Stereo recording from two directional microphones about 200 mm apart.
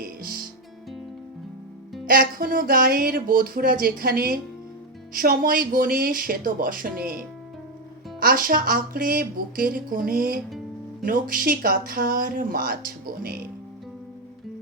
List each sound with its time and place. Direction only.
0.0 s music: 45° right (ahead or behind)
2.0 s speech: 45° right (ahead or behind)